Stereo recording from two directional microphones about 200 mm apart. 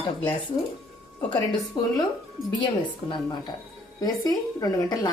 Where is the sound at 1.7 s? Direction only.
25° left (ahead or behind).